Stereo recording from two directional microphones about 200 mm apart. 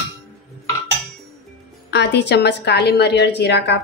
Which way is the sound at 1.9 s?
60° left (ahead or behind).